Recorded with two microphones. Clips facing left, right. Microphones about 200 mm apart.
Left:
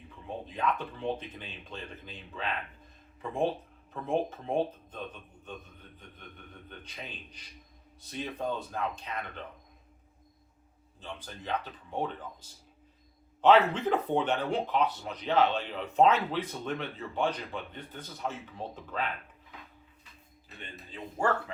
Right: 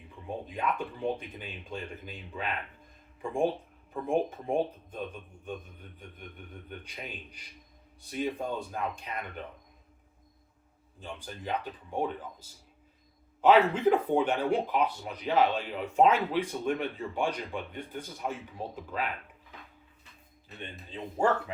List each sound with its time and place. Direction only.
0.3 s speech: 10° right (ahead or behind)
4.0 s speech: 15° right (ahead or behind)
6.1 s speech: 10° right (ahead or behind)
11.0 s speech: 10° right (ahead or behind)
20.6 s speech: 20° right (ahead or behind)